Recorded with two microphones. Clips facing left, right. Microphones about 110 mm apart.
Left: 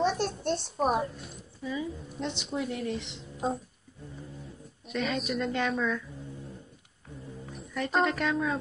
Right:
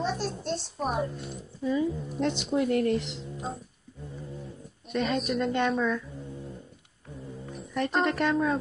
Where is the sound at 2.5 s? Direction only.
60° right (ahead or behind).